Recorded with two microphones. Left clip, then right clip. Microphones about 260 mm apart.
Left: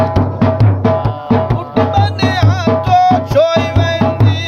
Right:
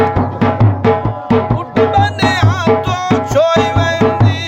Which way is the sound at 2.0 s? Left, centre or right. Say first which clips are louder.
Right 2 dB; centre.